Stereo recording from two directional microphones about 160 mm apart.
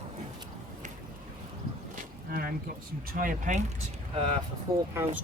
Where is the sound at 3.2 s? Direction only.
55° right (ahead or behind).